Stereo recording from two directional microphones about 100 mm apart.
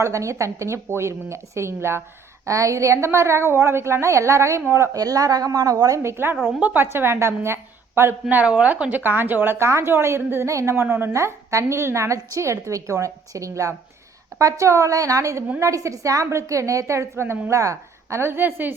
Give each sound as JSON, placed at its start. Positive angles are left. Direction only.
{"t": 0.0, "sound": "a woman's voice", "side_deg": -30}
{"t": 6.5, "sound": "a woman's voice", "side_deg": -15}
{"t": 6.8, "sound": "a woman's voice", "side_deg": -25}